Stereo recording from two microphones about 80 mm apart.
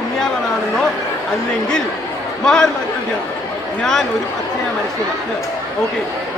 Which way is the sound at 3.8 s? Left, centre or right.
Centre.